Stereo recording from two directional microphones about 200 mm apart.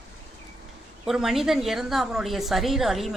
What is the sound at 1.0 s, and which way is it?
Speech, centre (ahead or behind).